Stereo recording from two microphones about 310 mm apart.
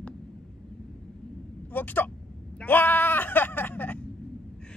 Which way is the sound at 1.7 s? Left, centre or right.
Centre.